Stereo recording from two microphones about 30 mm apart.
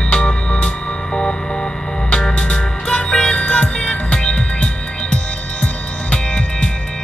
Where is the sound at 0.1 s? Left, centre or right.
Left.